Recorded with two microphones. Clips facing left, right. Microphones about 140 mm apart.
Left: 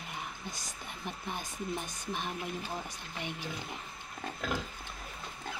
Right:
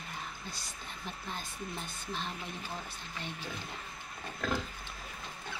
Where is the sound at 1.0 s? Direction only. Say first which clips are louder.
Left 3 dB; 15° left (ahead or behind).